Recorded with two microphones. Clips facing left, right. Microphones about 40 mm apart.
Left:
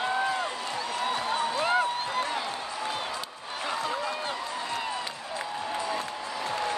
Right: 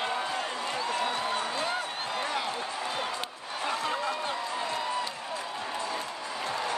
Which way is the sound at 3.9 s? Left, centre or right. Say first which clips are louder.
Even; centre.